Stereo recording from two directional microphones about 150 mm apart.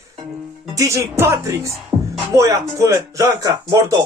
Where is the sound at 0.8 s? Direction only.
20° right (ahead or behind).